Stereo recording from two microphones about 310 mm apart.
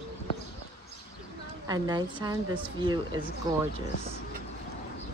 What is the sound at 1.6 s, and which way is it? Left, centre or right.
A woman's voice, centre.